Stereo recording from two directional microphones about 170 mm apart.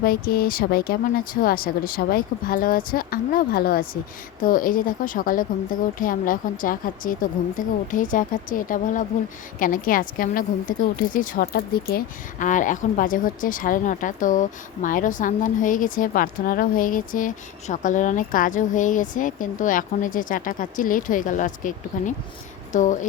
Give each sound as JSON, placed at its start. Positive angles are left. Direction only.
{"t": 0.0, "sound": "a woman's voice", "side_deg": 60}